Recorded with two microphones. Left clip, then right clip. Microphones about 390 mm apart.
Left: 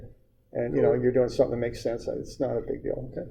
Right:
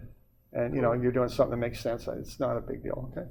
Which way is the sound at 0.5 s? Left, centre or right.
Right.